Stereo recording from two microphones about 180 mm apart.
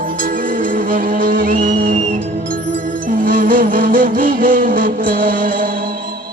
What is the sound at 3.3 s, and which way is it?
Music, 50° right (ahead or behind).